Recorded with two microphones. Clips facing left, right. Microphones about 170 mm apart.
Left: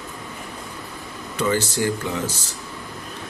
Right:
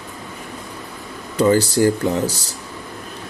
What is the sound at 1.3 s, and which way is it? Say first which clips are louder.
Speech: right 7 dB; 35° right (ahead or behind).